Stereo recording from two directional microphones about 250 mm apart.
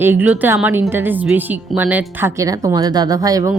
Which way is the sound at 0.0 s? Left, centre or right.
Centre.